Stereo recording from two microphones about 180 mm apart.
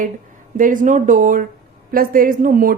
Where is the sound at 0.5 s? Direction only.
45° right (ahead or behind).